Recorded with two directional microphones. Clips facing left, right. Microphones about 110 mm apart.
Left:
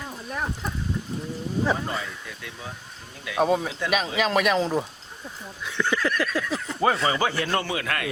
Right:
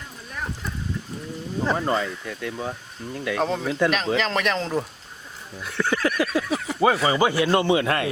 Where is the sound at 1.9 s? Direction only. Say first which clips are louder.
Right 7 dB; 55° right (ahead or behind).